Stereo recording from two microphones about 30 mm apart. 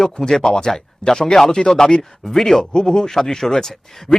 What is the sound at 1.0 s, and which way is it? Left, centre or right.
Speech, left.